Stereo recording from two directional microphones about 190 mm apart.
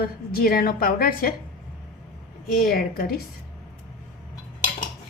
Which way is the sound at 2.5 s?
50° left (ahead or behind).